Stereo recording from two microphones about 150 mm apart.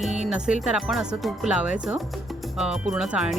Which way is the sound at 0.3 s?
5° right (ahead or behind).